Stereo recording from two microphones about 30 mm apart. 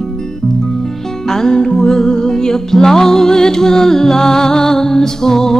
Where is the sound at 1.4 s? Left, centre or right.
Left.